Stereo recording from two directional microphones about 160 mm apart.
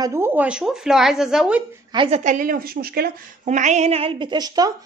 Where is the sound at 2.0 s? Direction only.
45° right (ahead or behind); by 3.1 s 70° right (ahead or behind).